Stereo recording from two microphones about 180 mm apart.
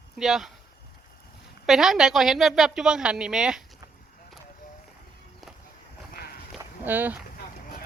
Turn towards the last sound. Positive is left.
turn(degrees=-10)  # may be behind; listen again after turning